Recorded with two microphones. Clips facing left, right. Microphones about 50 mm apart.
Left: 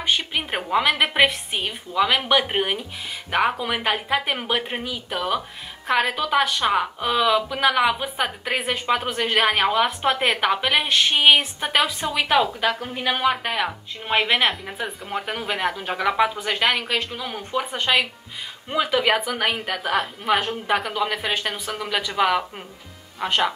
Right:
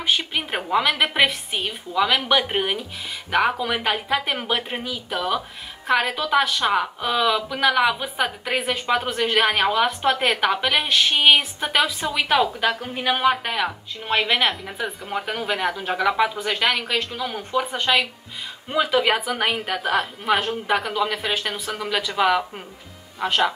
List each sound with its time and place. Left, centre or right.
0.0 s a woman's voice: centre